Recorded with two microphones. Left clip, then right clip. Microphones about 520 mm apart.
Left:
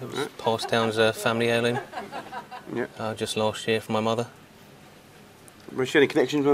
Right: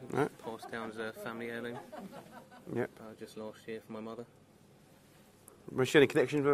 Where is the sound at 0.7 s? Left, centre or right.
Left.